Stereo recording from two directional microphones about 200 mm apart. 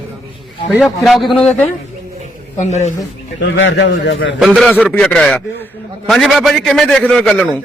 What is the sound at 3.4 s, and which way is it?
Speech, 65° left (ahead or behind).